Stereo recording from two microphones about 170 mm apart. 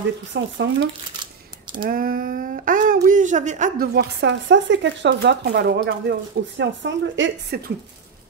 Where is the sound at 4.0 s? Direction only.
85° right.